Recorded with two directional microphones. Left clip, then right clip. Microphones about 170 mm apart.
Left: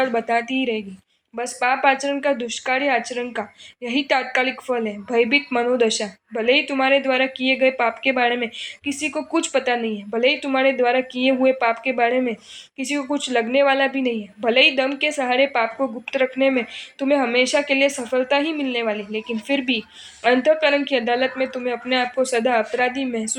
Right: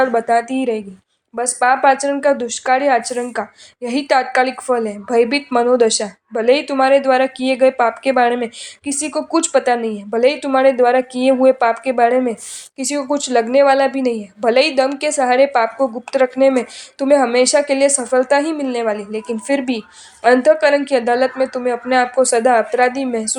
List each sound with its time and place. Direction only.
0.0 s a woman's voice: 35° right (ahead or behind)